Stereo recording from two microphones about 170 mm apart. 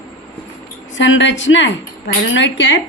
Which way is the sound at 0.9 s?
90° left.